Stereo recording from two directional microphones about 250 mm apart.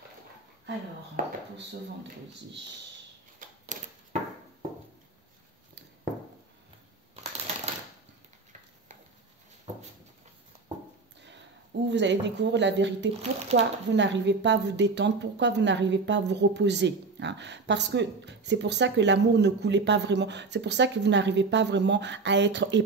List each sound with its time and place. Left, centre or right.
1.2 s speech: right
3.3 s a sound: right
11.9 s a woman's voice: right
13.2 s speech: right
13.9 s a woman's voice: right